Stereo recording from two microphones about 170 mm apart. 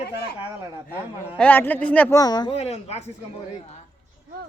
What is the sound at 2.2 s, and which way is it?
Speech, 25° left (ahead or behind).